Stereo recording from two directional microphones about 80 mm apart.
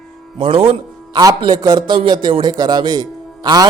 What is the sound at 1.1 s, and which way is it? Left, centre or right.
Speech, right.